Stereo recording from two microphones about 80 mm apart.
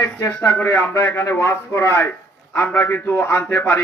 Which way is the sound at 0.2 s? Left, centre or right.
Left.